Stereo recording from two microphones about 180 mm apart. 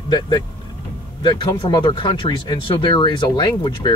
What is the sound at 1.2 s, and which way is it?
Speech, 20° left (ahead or behind).